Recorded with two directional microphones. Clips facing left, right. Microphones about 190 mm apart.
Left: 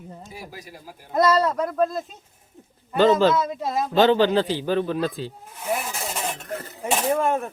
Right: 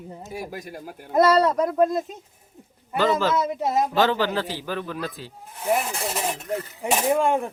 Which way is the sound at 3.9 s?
25° left (ahead or behind).